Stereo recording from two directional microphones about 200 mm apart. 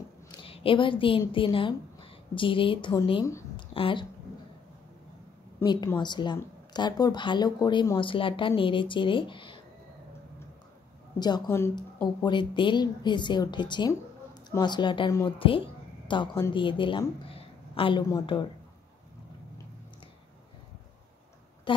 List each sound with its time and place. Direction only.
0.3 s a woman's voice: 25° left (ahead or behind)
5.6 s speech: 20° left (ahead or behind)
11.1 s speech: 20° left (ahead or behind)
21.7 s speech: 25° left (ahead or behind)